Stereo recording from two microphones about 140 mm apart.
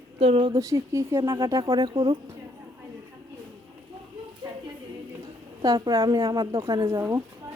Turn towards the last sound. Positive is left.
turn(degrees=-25)  # may be behind; listen again after turning